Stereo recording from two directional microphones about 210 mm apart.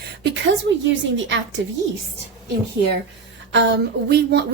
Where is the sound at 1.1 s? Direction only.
60° right (ahead or behind).